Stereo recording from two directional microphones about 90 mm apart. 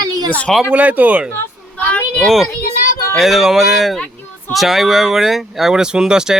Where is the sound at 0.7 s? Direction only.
15° right (ahead or behind).